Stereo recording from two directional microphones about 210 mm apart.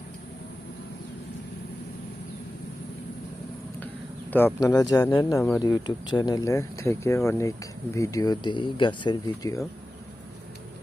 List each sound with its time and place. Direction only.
4.3 s speech: 10° left (ahead or behind)